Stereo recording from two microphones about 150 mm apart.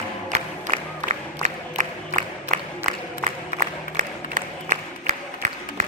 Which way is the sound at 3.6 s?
60° right (ahead or behind).